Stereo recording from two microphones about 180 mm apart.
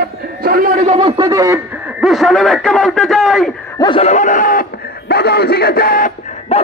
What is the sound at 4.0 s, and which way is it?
Speech, 40° left (ahead or behind).